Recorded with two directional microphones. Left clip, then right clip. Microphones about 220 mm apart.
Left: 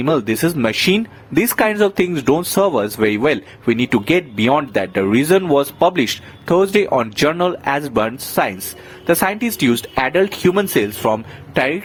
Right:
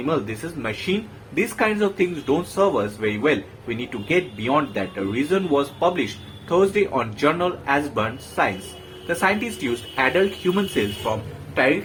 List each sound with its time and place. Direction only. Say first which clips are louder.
0.1 s speech: left 9 dB; 45° left (ahead or behind)